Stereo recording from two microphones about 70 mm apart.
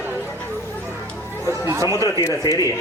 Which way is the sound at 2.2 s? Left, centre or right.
Left.